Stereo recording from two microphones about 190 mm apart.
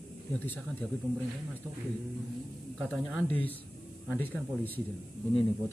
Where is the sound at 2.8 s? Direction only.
Centre (ahead or behind).